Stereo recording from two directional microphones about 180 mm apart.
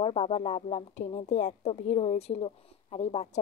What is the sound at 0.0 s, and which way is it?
A woman's voice, 35° left (ahead or behind).